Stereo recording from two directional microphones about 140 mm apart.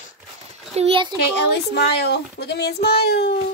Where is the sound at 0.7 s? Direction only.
45° right (ahead or behind).